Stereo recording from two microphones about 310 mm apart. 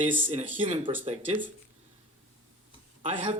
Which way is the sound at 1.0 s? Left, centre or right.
Right.